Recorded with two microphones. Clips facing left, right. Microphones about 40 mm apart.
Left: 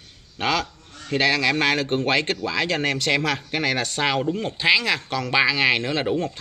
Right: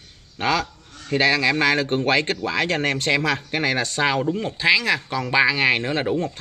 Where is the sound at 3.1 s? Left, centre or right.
Left.